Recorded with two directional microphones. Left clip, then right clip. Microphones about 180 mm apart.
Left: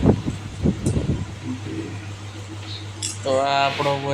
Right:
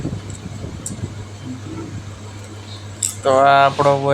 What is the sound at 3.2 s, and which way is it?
Speech, 20° right (ahead or behind).